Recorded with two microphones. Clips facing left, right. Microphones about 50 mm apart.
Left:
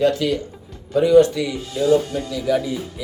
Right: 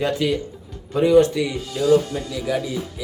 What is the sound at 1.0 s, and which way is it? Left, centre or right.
Speech, right.